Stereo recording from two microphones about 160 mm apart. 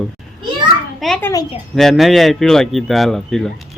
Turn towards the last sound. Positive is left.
turn(degrees=0)  # may be behind; listen again after turning